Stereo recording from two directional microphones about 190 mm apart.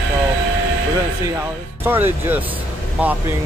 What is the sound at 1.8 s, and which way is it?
Speech, 10° right (ahead or behind).